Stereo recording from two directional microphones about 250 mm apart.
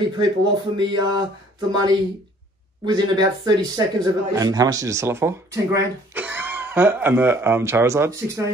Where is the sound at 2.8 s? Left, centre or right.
Centre.